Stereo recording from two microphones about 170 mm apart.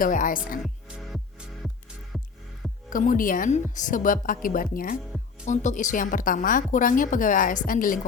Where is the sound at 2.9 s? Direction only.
55° left (ahead or behind).